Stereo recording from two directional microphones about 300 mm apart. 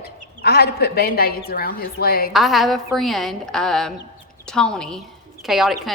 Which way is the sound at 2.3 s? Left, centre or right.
Centre.